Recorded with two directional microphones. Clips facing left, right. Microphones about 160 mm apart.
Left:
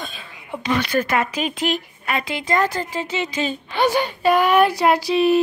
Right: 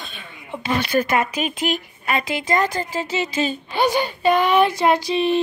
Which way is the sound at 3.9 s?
5° left (ahead or behind).